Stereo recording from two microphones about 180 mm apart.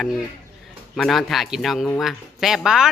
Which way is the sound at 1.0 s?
Centre (ahead or behind).